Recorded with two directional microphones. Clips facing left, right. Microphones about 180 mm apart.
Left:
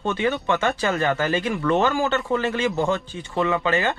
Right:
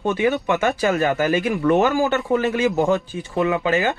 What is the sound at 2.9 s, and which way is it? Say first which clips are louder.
Speech: right 3 dB; 15° right (ahead or behind).